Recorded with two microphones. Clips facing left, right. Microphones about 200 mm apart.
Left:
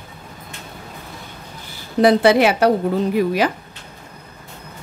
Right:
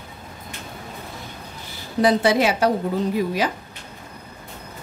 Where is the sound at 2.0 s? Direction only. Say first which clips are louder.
Left 5 dB; 65° left (ahead or behind).